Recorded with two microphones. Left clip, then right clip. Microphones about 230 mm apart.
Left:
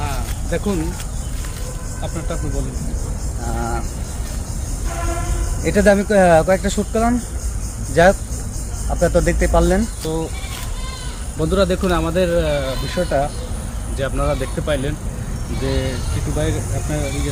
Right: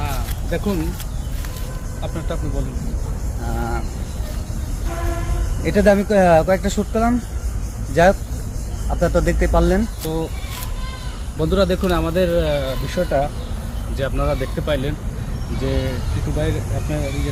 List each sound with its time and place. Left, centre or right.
0.0 s a sound: centre
5.6 s speech: centre
10.0 s speech: centre
11.3 s speech: centre
16.4 s speech: centre